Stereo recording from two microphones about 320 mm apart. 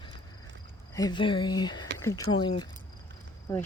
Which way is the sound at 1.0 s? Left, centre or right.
Centre.